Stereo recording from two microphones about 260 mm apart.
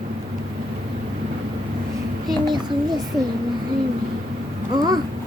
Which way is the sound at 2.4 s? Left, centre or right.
Centre.